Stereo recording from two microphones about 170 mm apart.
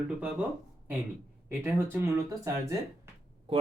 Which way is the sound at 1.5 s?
10° right (ahead or behind).